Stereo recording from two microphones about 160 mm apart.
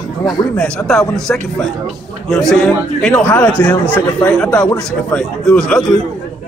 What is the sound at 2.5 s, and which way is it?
A man's voice, 5° left (ahead or behind).